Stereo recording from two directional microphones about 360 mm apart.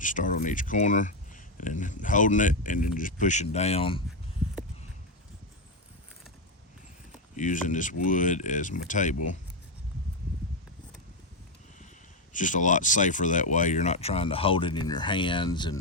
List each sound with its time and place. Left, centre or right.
0.0 s speech: left
7.3 s speech: left
12.3 s speech: left